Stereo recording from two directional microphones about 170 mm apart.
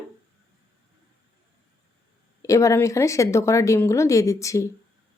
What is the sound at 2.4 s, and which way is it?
Speech, 20° left (ahead or behind).